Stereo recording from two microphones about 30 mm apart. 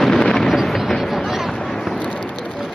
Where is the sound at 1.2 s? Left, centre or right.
Centre.